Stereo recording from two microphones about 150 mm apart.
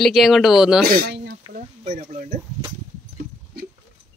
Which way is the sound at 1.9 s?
55° right (ahead or behind).